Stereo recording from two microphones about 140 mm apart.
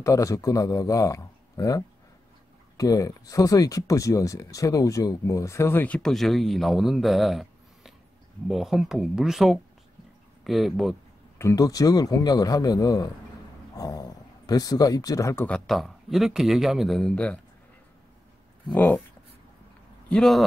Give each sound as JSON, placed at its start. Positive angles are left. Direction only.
{"t": 0.0, "sound": "speech", "side_deg": 25}
{"t": 5.9, "sound": "a man's voice", "side_deg": 0}
{"t": 11.3, "sound": "speech", "side_deg": 20}
{"t": 15.4, "sound": "speech", "side_deg": 5}
{"t": 18.7, "sound": "speech", "side_deg": 10}
{"t": 20.1, "sound": "speech", "side_deg": 5}